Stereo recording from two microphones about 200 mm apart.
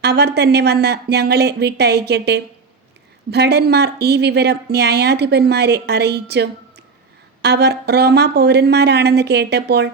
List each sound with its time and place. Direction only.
0.0 s a woman's voice: 55° right (ahead or behind)